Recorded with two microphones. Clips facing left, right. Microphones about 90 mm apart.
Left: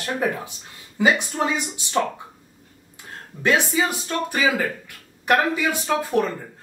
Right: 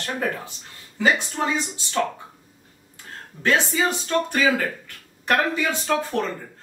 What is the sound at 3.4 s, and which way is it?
Speech, 15° left (ahead or behind).